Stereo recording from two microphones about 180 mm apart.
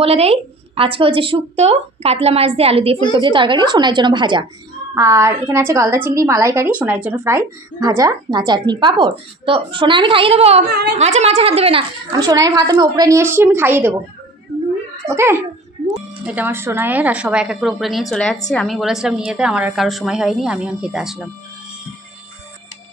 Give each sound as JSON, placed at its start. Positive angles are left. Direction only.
{"t": 0.0, "sound": "a woman's voice", "side_deg": -35}
{"t": 10.7, "sound": "a woman's voice", "side_deg": -65}
{"t": 11.0, "sound": "speech", "side_deg": -40}
{"t": 12.1, "sound": "a woman's voice", "side_deg": -20}
{"t": 15.0, "sound": "a woman's voice", "side_deg": -15}